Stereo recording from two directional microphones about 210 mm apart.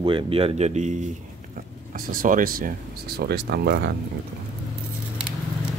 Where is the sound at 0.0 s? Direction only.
25° right (ahead or behind); by 3.9 s 50° right (ahead or behind).